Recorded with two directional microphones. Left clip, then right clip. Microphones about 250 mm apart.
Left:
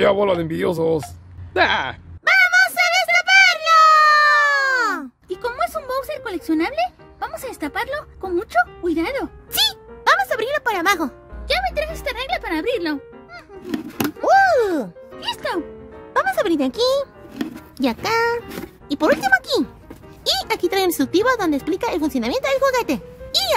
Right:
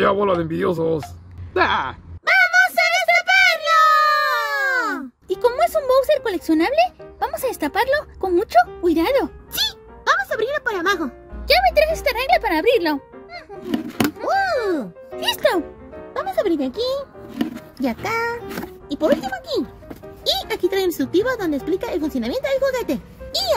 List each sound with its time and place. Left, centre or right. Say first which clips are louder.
0.4 s speech: even; left
1.5 s a sound: left 1 dB; left
5.3 s speech: right 6 dB; centre
9.5 s music: left 4 dB; left
11.4 s speech: right 6 dB; centre
14.2 s speech: left 7 dB; left
15.1 s a child's voice: right 6 dB; centre
16.1 s speech: left 2 dB; left
17.4 s speech: right 3 dB; centre
17.7 s speech: left 3 dB; left
20.2 s speech: left 1 dB; left